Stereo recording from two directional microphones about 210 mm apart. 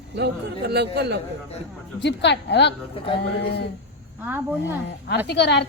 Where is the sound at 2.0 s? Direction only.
55° left (ahead or behind).